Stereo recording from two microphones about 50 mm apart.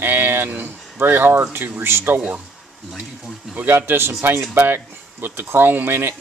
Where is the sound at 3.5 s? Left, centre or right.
Right.